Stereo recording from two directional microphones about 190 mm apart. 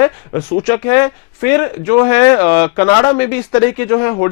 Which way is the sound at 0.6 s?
15° left (ahead or behind).